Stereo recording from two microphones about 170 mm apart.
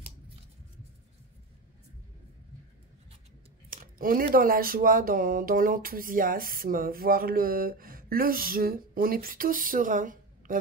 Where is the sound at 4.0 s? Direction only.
55° right (ahead or behind).